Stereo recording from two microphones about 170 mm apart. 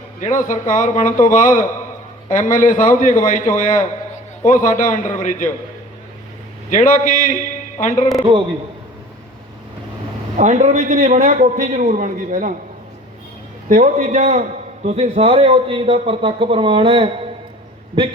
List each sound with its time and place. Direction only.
0.2 s a man's voice: 50° left (ahead or behind)
6.7 s a man's voice: 50° left (ahead or behind)
8.3 s a man's voice: 30° right (ahead or behind)
10.3 s a man's voice: 45° right (ahead or behind)
13.7 s a man's voice: 50° right (ahead or behind); by 17.1 s 30° right (ahead or behind)